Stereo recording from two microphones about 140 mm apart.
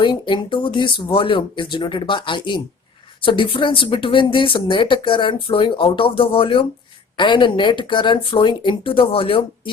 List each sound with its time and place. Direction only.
0.0 s speech: 35° left (ahead or behind)